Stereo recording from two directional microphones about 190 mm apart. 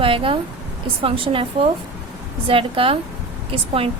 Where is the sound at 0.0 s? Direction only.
30° right (ahead or behind).